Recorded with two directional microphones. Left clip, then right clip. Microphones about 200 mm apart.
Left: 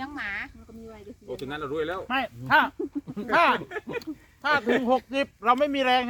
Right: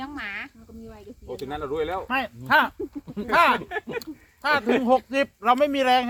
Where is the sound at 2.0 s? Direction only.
25° right (ahead or behind).